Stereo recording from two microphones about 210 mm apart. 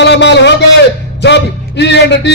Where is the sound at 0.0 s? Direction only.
55° left (ahead or behind).